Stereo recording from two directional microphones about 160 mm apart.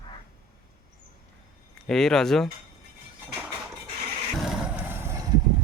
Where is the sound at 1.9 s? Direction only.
5° left (ahead or behind).